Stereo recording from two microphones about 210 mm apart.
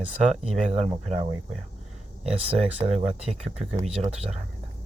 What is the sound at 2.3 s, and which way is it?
Speech, 25° right (ahead or behind).